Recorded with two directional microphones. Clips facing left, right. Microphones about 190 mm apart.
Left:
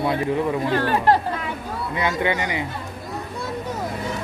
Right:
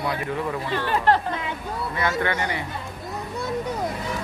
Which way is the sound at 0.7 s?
45° left (ahead or behind).